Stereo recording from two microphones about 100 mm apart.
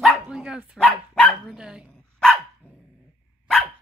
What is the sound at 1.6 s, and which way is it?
Speech, 5° right (ahead or behind).